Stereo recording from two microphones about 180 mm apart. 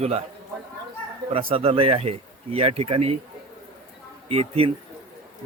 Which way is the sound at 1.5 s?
30° right (ahead or behind).